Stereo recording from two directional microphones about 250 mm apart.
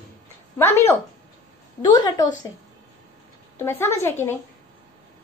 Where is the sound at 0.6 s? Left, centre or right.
Centre.